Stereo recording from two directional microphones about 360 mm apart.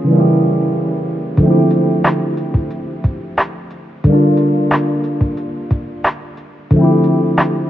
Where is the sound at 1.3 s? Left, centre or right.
Centre.